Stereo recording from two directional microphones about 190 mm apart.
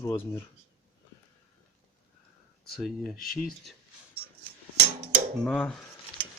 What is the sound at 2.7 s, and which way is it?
Speech, centre (ahead or behind).